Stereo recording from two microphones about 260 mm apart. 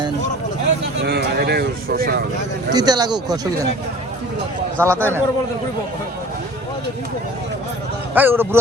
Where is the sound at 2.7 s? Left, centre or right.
Centre.